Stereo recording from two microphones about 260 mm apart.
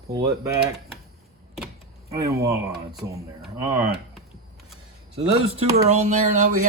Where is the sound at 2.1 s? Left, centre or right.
Centre.